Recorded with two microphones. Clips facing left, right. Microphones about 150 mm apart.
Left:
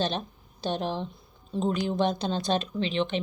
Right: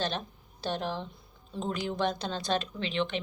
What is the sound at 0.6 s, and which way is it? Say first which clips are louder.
Speech: left 3 dB; 20° left (ahead or behind).